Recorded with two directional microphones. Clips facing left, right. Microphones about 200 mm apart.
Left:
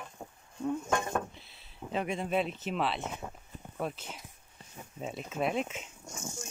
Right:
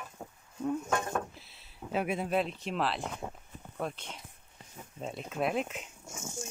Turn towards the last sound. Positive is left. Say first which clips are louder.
# left 1 dB
turn(degrees=-5)  # may be behind; listen again after turning